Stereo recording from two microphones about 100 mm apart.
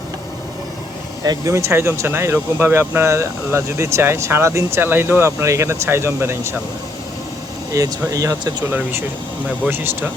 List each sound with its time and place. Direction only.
1.2 s speech: 35° right (ahead or behind)
7.7 s speech: 35° right (ahead or behind)
9.6 s speech: 20° right (ahead or behind)